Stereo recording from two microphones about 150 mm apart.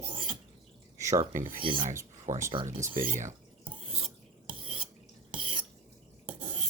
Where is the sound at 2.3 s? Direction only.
55° right (ahead or behind).